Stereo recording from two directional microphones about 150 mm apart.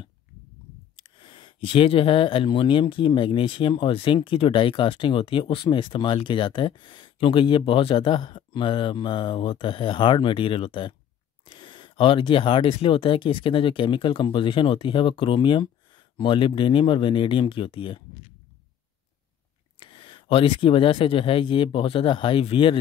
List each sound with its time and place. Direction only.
0.9 s speech: 35° left (ahead or behind)
19.8 s speech: 35° left (ahead or behind)